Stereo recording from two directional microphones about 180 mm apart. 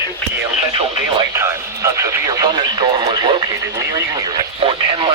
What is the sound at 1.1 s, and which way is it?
Radio, 15° right (ahead or behind).